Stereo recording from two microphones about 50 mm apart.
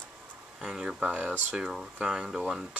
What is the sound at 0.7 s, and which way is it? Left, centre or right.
Speech, centre.